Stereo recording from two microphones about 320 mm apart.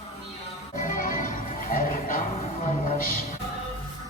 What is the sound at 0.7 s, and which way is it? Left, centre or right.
Music, left.